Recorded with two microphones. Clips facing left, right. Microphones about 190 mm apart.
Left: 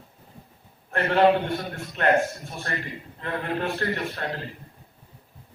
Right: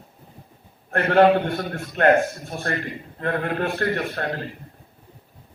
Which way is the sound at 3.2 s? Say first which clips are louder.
Right 4 dB; 50° right (ahead or behind).